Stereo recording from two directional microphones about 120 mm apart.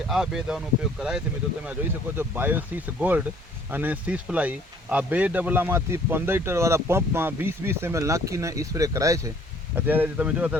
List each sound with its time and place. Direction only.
0.1 s speech: 5° right (ahead or behind)
2.1 s speech: 15° right (ahead or behind)
9.7 s speech: 15° right (ahead or behind)